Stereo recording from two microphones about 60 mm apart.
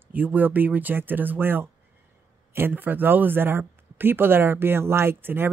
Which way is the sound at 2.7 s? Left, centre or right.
Right.